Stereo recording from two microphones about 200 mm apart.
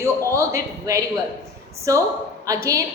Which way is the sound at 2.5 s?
15° right (ahead or behind).